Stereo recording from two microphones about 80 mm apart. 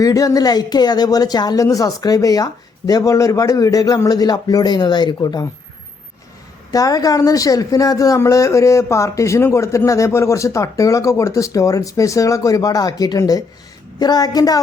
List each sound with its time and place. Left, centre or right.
0.0 s speech: left
6.7 s speech: left